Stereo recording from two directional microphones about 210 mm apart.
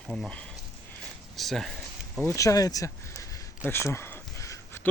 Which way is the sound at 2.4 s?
15° left (ahead or behind).